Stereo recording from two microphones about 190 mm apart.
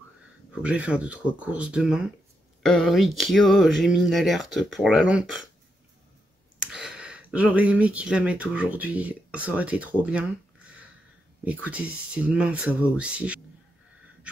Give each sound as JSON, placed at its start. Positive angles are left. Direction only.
{"t": 0.6, "sound": "speech", "side_deg": -5}
{"t": 6.7, "sound": "speech", "side_deg": -5}
{"t": 11.4, "sound": "speech", "side_deg": -10}